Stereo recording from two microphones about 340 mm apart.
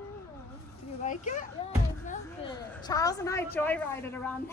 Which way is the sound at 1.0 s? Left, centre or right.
Left.